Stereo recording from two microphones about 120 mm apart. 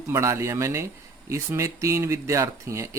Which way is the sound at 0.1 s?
25° right (ahead or behind).